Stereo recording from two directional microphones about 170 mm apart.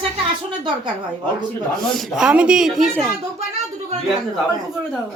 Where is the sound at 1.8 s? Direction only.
Centre (ahead or behind).